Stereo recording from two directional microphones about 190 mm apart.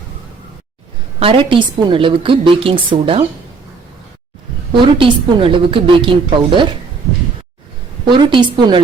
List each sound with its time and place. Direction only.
1.2 s a woman's voice: 25° right (ahead or behind)
4.9 s a woman's voice: 25° right (ahead or behind)
8.0 s a woman's voice: 25° right (ahead or behind)